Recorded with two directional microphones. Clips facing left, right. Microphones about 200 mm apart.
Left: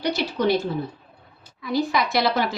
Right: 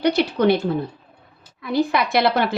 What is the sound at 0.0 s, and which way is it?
Speech, 60° right (ahead or behind).